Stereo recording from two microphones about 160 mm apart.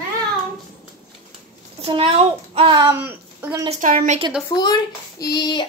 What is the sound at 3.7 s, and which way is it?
Speech, 55° right (ahead or behind).